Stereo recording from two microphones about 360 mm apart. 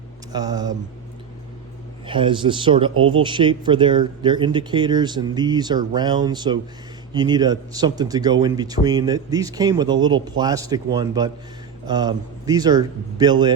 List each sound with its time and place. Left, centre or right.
0.3 s speech: centre
2.0 s speech: centre
2.9 s speech: right
3.2 s speech: centre